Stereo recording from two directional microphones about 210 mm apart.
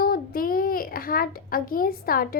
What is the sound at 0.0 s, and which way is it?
A child's voice, 45° left (ahead or behind).